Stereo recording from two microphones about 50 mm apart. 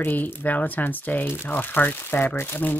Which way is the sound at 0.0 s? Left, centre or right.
Left.